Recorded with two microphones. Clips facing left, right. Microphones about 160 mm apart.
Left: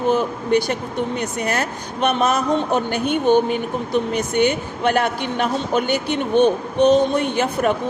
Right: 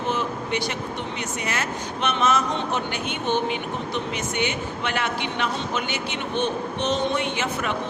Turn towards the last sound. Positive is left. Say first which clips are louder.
# left 7 dB
turn(degrees=45)  # may be behind; listen again after turning